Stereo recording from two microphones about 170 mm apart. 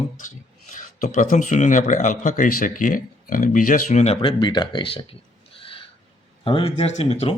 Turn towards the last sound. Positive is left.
turn(degrees=40)  # may be behind; listen again after turning